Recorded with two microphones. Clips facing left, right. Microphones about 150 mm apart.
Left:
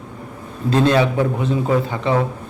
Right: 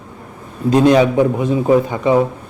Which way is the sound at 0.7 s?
15° right (ahead or behind).